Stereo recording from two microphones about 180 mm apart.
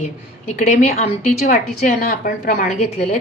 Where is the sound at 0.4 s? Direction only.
35° left (ahead or behind).